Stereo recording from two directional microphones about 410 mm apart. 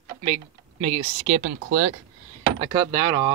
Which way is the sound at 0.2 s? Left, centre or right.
Centre.